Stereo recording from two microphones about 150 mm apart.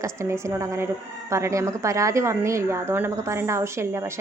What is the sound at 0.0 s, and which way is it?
A woman's voice, 20° right (ahead or behind).